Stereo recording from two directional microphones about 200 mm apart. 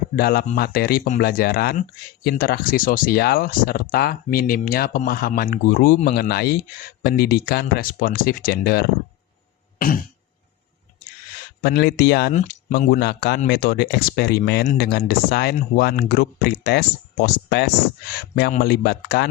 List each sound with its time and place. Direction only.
0.2 s speech: 50° left (ahead or behind)
9.7 s throat clearing: 45° left (ahead or behind)
11.6 s speech: 50° left (ahead or behind)
12.3 s speech: 35° left (ahead or behind); by 19.3 s 55° left (ahead or behind)